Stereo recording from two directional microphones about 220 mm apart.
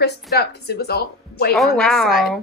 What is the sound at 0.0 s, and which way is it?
Speech, 50° left (ahead or behind).